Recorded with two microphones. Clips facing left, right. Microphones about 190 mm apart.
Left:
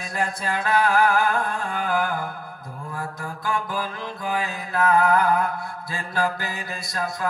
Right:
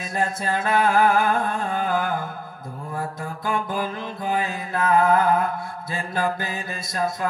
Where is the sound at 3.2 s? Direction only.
20° right (ahead or behind).